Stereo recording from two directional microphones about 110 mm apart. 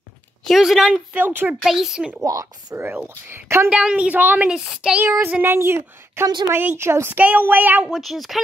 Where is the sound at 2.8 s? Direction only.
20° right (ahead or behind).